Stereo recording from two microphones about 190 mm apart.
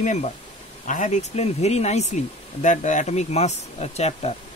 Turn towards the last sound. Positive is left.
turn(degrees=35)  # may be behind; listen again after turning